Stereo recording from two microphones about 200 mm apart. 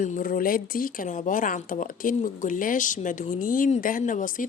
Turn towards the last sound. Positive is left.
turn(degrees=40)  # may be behind; listen again after turning